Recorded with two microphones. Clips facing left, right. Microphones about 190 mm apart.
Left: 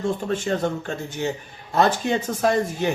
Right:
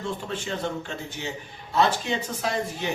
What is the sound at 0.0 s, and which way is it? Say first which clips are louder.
Speech: left 7 dB; 45° left (ahead or behind).